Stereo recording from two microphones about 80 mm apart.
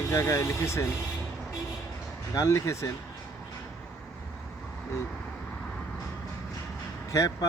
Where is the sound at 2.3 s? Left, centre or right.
Left.